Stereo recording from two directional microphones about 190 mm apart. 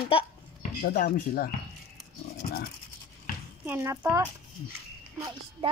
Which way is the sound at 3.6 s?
10° right (ahead or behind).